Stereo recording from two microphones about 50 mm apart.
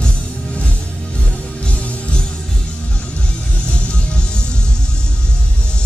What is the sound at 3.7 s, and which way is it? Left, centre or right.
Music, centre.